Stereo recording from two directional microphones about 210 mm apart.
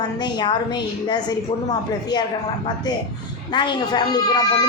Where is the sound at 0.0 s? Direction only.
20° left (ahead or behind).